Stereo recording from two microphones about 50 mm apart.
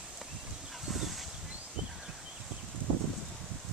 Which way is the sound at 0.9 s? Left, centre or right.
Centre.